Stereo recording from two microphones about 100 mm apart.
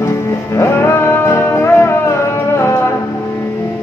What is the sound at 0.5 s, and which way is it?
Music, 25° left (ahead or behind).